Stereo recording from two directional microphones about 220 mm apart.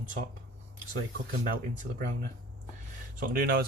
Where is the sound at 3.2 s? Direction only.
45° right (ahead or behind).